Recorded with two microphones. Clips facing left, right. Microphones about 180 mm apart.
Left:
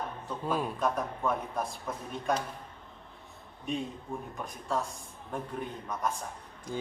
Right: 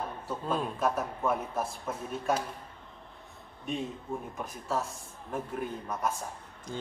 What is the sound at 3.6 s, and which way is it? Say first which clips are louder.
A man's voice: even; centre (ahead or behind).